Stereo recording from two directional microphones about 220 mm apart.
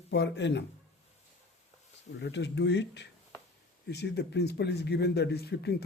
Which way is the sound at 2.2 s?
55° left (ahead or behind).